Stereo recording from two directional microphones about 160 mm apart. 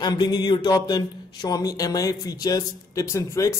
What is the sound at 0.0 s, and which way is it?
A man's voice, 25° left (ahead or behind).